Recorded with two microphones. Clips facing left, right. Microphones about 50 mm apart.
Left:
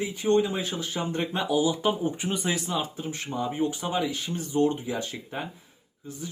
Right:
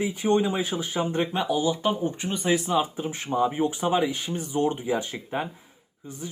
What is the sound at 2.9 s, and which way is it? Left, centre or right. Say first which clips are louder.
Speech: right 5 dB; centre.